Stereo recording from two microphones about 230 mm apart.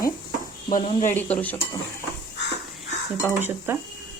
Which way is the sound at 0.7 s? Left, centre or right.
Left.